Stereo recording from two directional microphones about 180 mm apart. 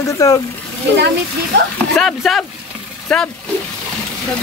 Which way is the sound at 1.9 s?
Centre (ahead or behind).